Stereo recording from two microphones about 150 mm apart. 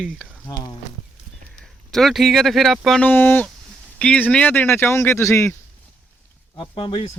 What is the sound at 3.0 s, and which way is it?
Speech, 10° left (ahead or behind).